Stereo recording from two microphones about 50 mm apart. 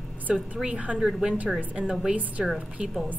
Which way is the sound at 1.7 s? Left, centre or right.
Centre.